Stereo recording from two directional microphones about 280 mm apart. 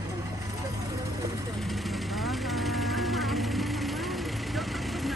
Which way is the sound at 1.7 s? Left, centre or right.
Centre.